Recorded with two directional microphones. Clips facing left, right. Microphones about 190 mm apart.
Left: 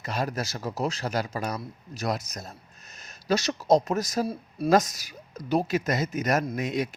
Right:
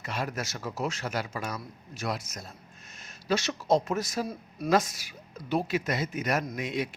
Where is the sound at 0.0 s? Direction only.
40° left (ahead or behind).